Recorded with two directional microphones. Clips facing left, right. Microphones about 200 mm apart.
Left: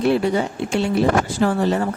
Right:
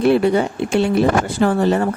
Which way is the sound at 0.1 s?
60° right (ahead or behind).